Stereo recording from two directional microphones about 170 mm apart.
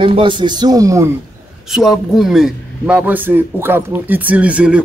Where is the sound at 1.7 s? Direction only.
Centre (ahead or behind).